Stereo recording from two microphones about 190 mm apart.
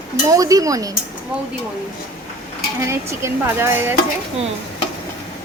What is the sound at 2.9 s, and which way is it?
A woman's voice, 15° right (ahead or behind).